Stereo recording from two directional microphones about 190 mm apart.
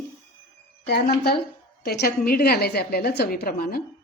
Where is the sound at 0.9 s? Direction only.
55° left (ahead or behind).